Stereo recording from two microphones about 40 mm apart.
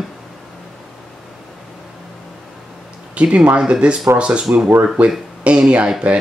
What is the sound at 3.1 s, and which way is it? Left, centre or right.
Speech, right.